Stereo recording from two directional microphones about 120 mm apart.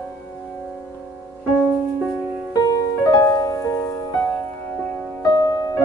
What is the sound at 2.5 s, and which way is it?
Music, 30° left (ahead or behind).